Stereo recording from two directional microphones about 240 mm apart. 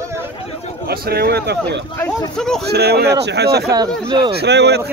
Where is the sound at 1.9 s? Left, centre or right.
Centre.